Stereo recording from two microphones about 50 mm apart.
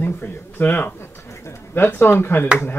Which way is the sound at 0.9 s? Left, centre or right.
Left.